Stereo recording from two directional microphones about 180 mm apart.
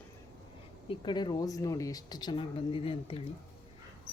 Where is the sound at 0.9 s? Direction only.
25° left (ahead or behind).